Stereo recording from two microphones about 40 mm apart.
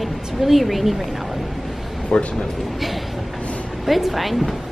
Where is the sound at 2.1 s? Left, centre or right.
Centre.